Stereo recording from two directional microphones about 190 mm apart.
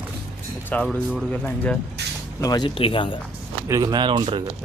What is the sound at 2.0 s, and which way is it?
Vehicle, 60° right (ahead or behind).